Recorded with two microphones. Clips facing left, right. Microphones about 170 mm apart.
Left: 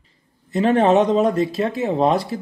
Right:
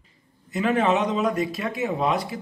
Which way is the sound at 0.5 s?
35° left (ahead or behind).